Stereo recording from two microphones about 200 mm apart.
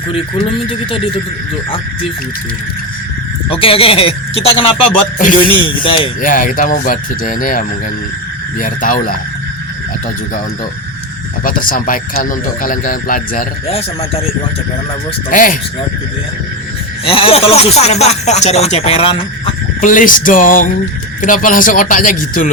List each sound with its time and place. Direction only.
0.7 s speech: 25° left (ahead or behind)
3.5 s speech: 30° left (ahead or behind)
6.2 s speech: 40° left (ahead or behind)
11.4 s speech: 45° left (ahead or behind)
15.3 s speech: 40° left (ahead or behind)
17.1 s speech: 25° left (ahead or behind)
19.8 s speech: 40° left (ahead or behind)